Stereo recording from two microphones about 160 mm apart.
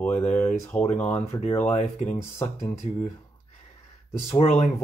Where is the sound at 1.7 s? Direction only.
45° left (ahead or behind).